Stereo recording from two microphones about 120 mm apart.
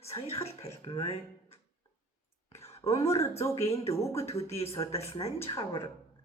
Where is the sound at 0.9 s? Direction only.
55° left (ahead or behind).